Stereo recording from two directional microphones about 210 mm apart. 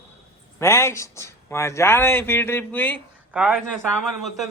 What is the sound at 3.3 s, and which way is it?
A man's voice, 5° right (ahead or behind).